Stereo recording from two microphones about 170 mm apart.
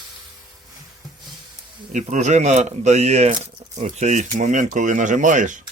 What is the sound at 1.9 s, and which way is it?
Speech, 45° right (ahead or behind).